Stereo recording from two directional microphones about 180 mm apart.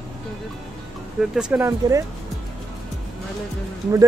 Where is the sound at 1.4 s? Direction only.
5° right (ahead or behind).